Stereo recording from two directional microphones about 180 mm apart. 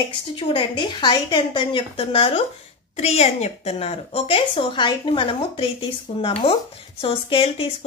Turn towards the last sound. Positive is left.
turn(degrees=30)  # may be behind; listen again after turning